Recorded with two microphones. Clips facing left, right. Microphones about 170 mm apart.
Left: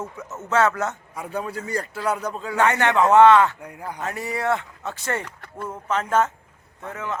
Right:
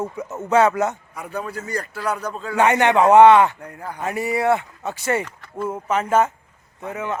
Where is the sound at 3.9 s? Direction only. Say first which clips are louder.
Right 6 dB; 10° right (ahead or behind).